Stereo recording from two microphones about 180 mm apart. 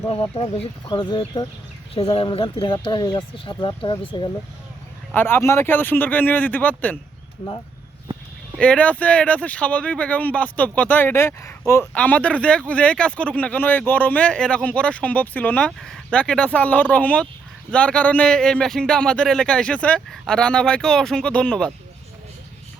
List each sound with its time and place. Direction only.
0.1 s speech: 30° left (ahead or behind)
5.1 s speech: 10° left (ahead or behind)
8.5 s speech: 5° left (ahead or behind)